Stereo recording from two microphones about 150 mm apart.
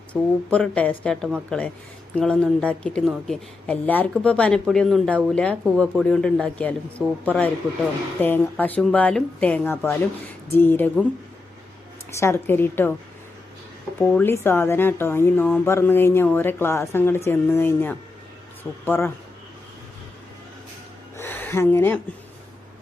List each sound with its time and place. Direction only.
0.1 s speech: 5° left (ahead or behind)
8.2 s speech: 10° left (ahead or behind)
12.1 s speech: 15° left (ahead or behind)
14.0 s speech: 10° left (ahead or behind)
21.2 s a sound: 15° left (ahead or behind)